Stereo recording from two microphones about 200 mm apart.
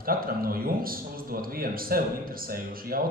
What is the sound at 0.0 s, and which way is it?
Speech, 45° right (ahead or behind).